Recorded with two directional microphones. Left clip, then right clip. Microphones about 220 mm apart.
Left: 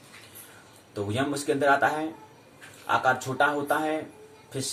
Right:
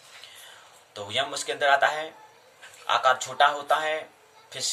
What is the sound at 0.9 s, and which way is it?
Speech, 10° left (ahead or behind).